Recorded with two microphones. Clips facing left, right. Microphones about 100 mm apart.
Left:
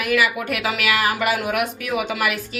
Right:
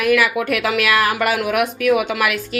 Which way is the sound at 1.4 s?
90° right.